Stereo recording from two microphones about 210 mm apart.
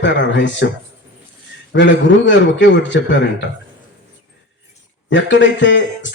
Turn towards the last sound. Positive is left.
turn(degrees=60)  # may be behind; listen again after turning